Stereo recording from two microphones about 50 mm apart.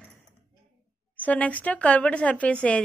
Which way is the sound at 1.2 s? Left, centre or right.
Left.